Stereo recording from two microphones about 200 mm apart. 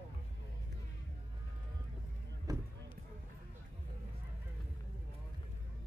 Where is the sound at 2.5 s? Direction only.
20° right (ahead or behind).